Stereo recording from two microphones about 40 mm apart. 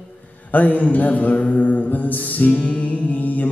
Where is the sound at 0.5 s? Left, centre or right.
Left.